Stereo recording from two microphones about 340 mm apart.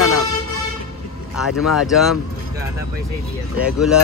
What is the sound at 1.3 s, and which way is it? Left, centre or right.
Speech, centre.